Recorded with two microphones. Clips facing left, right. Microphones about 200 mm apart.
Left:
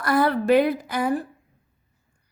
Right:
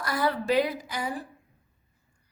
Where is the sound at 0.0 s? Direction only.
55° left (ahead or behind).